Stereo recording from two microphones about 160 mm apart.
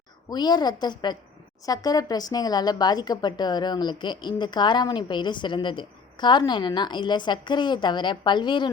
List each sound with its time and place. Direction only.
0.3 s speech: 25° left (ahead or behind)